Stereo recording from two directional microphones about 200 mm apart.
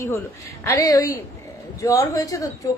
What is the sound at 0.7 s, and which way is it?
A woman's voice, 15° left (ahead or behind).